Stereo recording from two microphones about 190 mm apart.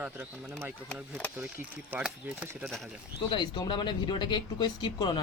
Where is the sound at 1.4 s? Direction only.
10° right (ahead or behind).